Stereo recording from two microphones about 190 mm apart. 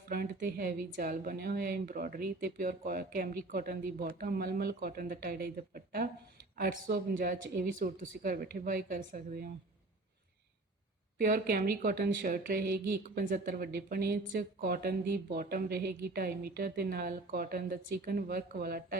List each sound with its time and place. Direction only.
0.1 s a woman's voice: 50° right (ahead or behind)
11.2 s a woman's voice: 50° right (ahead or behind)